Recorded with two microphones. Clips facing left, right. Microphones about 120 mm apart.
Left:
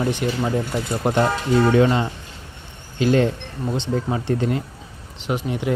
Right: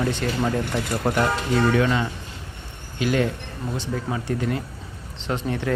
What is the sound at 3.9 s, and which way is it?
Mantra, 35° left (ahead or behind).